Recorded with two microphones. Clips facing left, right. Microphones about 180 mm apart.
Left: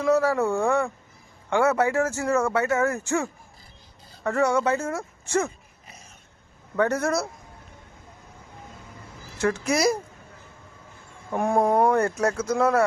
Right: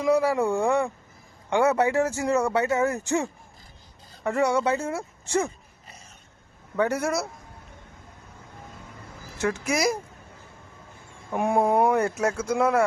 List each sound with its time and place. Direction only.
0.0 s speech: 15° right (ahead or behind)
6.7 s speech: 10° right (ahead or behind)
9.4 s speech: 10° right (ahead or behind)
11.3 s speech: 10° right (ahead or behind)